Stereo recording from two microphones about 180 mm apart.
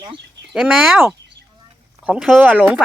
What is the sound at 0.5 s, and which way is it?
Speech, 5° right (ahead or behind).